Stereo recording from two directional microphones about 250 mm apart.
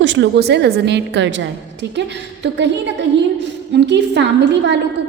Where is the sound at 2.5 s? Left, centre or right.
Right.